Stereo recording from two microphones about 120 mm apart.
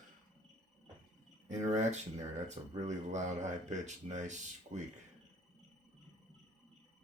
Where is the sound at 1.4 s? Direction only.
75° right (ahead or behind).